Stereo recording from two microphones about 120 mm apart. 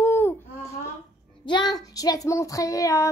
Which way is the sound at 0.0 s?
20° left (ahead or behind).